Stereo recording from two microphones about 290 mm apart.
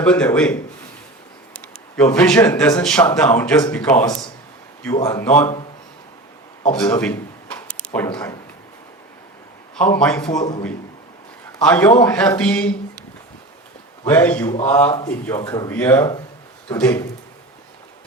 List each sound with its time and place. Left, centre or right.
0.0 s a man's voice: centre
2.0 s a man's voice: centre
6.7 s a sound: centre
9.7 s a man's voice: centre
10.4 s speech: centre
11.6 s a man's voice: centre
14.1 s a man's voice: centre